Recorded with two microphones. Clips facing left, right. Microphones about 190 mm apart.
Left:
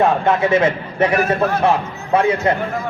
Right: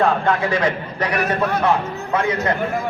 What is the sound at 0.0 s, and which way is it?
A man's voice, 20° left (ahead or behind).